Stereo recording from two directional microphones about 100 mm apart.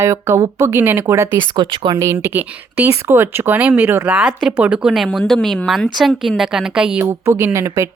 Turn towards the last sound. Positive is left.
turn(degrees=-30)  # may be behind; listen again after turning